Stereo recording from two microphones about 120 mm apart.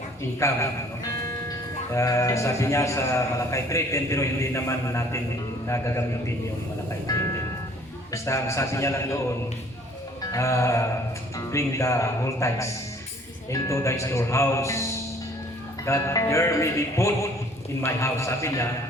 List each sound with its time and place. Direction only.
0.3 s a man's voice: 25° left (ahead or behind)
1.9 s a man's voice: 25° left (ahead or behind)
8.1 s a man's voice: 25° left (ahead or behind)
10.3 s a man's voice: 25° left (ahead or behind)
15.9 s a man's voice: 25° left (ahead or behind)